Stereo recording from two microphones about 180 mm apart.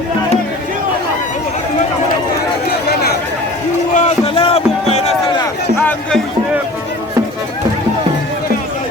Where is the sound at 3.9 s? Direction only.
40° left (ahead or behind).